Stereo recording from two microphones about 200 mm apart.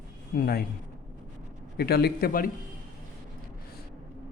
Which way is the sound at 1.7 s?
55° left (ahead or behind).